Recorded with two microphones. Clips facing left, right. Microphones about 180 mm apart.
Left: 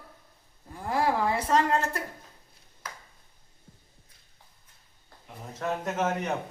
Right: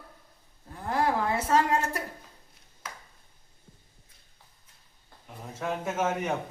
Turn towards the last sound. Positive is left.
turn(degrees=-10)  # may be behind; listen again after turning